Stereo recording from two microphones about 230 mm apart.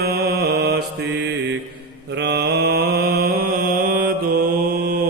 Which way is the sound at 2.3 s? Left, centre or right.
Right.